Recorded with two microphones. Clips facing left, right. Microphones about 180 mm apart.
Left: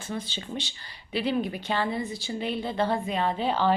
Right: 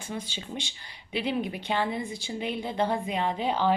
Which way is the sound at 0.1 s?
10° right (ahead or behind).